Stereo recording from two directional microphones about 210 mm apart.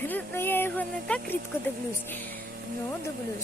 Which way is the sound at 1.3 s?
10° left (ahead or behind).